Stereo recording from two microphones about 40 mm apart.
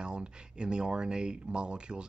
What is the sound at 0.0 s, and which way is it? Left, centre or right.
Speech, right.